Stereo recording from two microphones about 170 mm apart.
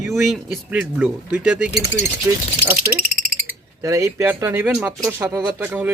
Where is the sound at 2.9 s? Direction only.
25° right (ahead or behind).